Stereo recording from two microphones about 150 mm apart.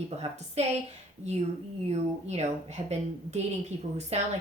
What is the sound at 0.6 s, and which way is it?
A woman's voice, 45° right (ahead or behind).